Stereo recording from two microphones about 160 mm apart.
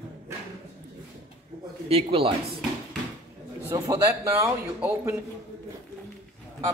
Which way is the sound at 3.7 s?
15° right (ahead or behind).